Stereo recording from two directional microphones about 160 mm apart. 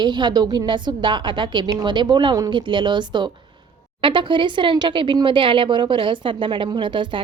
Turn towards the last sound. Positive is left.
turn(degrees=-30)  # may be behind; listen again after turning